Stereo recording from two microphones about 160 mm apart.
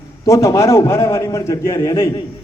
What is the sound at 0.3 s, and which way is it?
A man's voice, 20° left (ahead or behind).